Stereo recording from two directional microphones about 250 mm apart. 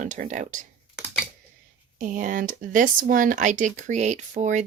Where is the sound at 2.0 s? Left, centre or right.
Right.